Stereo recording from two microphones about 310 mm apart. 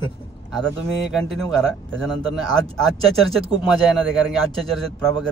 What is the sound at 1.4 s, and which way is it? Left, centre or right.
Speech, centre.